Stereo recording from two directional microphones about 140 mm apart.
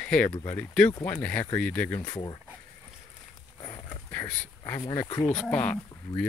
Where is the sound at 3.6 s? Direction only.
30° left (ahead or behind).